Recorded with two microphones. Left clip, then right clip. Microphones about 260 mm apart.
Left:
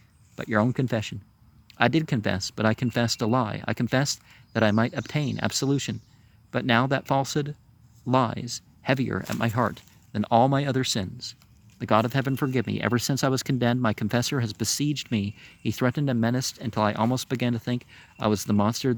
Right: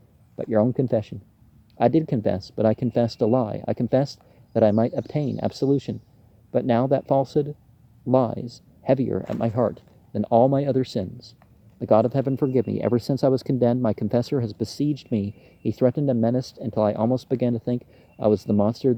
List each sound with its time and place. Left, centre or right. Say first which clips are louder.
0.3 s speech: right 4 dB; left